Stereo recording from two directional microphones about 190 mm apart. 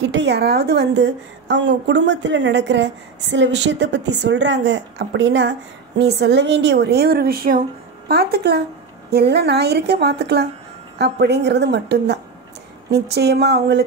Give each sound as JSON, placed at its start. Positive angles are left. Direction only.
{"t": 0.0, "sound": "a woman's voice", "side_deg": -65}